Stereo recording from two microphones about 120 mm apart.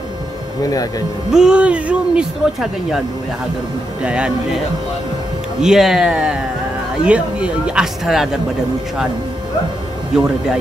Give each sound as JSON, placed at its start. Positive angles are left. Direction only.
{"t": 0.7, "sound": "speech", "side_deg": 30}
{"t": 1.3, "sound": "speech", "side_deg": -5}
{"t": 4.0, "sound": "speech", "side_deg": -10}
{"t": 5.6, "sound": "speech", "side_deg": -5}
{"t": 10.1, "sound": "speech", "side_deg": -5}